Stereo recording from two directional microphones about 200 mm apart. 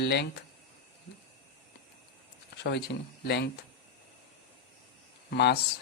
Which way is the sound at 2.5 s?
55° left (ahead or behind).